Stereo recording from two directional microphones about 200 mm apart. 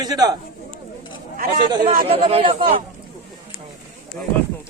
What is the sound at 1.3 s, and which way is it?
Speech, 45° right (ahead or behind).